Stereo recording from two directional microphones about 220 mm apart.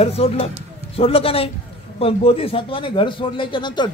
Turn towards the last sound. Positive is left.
turn(degrees=20)  # may be behind; listen again after turning